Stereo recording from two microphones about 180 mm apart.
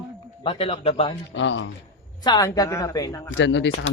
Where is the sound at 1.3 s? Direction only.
90° left.